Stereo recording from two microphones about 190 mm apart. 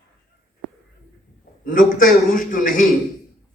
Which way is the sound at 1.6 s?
45° left (ahead or behind).